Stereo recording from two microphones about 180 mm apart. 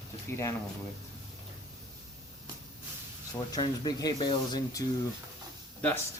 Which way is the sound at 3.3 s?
20° left (ahead or behind).